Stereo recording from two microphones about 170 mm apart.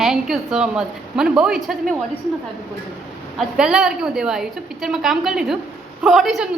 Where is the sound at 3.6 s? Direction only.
5° right (ahead or behind).